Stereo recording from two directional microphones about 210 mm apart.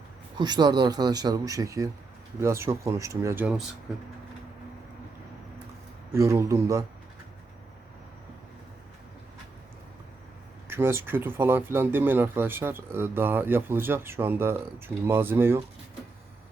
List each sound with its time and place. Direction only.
0.3 s speech: 20° right (ahead or behind)
6.1 s speech: 15° right (ahead or behind)
10.7 s speech: 10° right (ahead or behind)